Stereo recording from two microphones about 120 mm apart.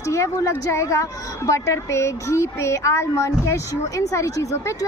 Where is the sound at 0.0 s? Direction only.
25° left (ahead or behind).